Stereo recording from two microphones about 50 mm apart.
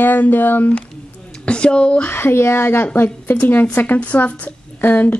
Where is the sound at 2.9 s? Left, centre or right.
Left.